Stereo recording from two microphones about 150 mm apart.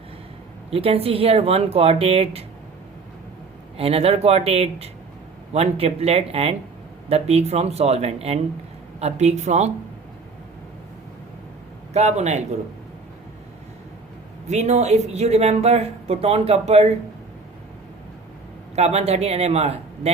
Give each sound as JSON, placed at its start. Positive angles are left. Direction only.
{"t": 0.7, "sound": "speech", "side_deg": -40}
{"t": 3.8, "sound": "speech", "side_deg": -40}
{"t": 11.9, "sound": "speech", "side_deg": -50}
{"t": 14.4, "sound": "speech", "side_deg": -50}
{"t": 18.8, "sound": "speech", "side_deg": -45}